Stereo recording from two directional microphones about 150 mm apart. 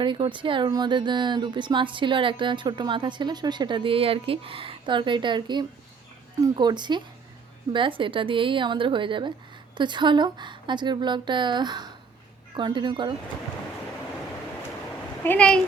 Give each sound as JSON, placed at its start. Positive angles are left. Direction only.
{"t": 0.0, "sound": "speech", "side_deg": -35}
{"t": 15.2, "sound": "speech", "side_deg": 10}